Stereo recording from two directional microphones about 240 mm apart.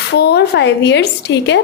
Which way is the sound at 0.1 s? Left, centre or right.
Left.